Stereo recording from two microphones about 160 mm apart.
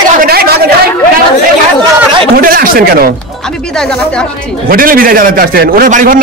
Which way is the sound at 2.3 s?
65° right (ahead or behind).